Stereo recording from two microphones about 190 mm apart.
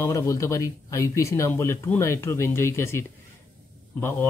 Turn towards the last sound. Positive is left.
turn(degrees=10)  # may be behind; listen again after turning